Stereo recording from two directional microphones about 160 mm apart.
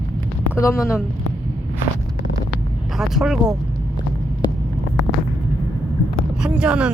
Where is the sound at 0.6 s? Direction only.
20° left (ahead or behind).